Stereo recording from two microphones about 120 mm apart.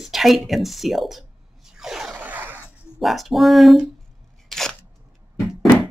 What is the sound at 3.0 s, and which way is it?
Speech, centre (ahead or behind).